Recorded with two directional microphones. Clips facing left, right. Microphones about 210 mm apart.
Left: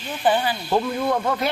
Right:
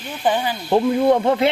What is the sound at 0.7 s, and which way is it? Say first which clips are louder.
Speech: right 8 dB; 30° right (ahead or behind).